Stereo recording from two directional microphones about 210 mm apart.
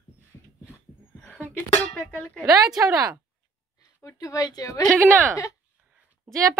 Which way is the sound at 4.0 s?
15° left (ahead or behind).